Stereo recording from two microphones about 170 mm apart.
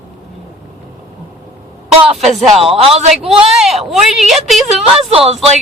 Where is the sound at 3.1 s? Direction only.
Centre (ahead or behind).